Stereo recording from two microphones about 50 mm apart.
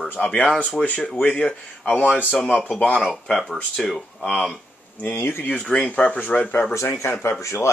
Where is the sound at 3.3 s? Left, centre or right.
Centre.